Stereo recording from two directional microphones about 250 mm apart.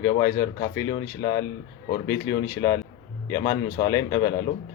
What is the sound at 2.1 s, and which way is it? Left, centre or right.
Speech, centre.